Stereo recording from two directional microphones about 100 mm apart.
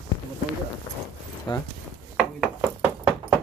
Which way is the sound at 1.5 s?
50° left (ahead or behind).